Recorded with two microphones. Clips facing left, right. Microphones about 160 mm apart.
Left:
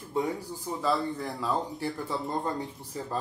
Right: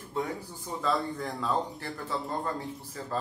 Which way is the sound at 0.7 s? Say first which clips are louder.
Left 1 dB; 5° left (ahead or behind).